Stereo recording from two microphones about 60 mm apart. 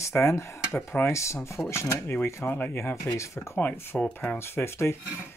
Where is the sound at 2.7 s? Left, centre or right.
Left.